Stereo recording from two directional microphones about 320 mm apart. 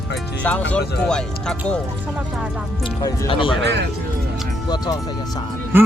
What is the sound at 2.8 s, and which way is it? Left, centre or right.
Speech, centre.